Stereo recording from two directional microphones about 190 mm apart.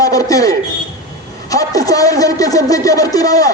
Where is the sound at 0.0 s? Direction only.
20° left (ahead or behind).